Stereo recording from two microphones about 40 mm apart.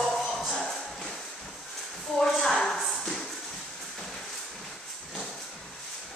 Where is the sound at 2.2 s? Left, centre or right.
Centre.